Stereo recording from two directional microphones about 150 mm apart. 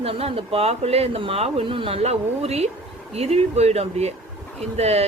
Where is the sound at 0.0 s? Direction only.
40° right (ahead or behind).